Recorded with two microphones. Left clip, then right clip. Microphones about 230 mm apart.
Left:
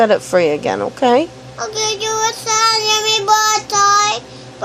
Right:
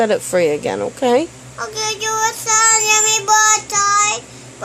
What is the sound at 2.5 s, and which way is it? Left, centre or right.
Child singing, centre.